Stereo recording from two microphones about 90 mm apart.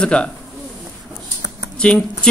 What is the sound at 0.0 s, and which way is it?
Speech, 10° left (ahead or behind).